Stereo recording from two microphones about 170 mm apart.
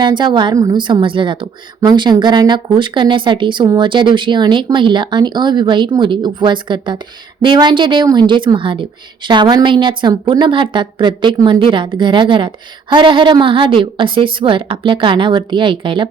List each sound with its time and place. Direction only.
0.0 s a woman's voice: 25° right (ahead or behind)